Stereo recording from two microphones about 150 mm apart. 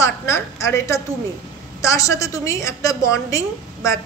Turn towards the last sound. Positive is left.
turn(degrees=20)  # may be behind; listen again after turning